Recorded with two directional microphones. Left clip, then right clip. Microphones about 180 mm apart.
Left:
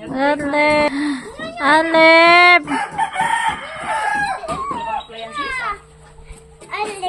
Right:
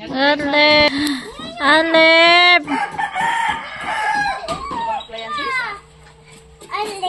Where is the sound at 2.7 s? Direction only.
20° left (ahead or behind).